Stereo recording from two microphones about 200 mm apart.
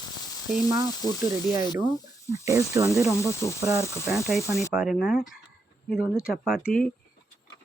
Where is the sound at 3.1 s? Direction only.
15° left (ahead or behind).